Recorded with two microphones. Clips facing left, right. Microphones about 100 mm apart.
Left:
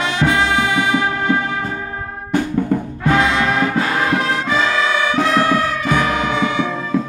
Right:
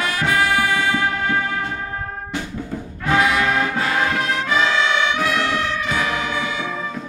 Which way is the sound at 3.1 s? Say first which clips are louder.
Even; 25° left (ahead or behind).